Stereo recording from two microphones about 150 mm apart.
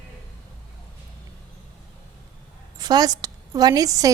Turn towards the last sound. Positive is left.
turn(degrees=-25)  # may be behind; listen again after turning